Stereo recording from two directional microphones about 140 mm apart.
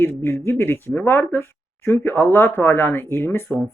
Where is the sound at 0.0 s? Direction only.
15° left (ahead or behind).